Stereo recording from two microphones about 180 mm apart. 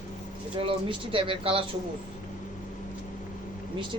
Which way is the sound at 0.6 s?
30° right (ahead or behind).